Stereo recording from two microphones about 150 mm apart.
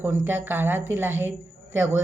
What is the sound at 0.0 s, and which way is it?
A woman's voice, 15° right (ahead or behind).